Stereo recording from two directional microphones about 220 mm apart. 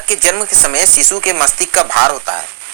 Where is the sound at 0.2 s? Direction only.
50° right (ahead or behind).